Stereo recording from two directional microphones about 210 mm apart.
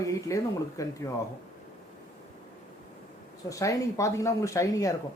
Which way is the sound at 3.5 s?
15° left (ahead or behind).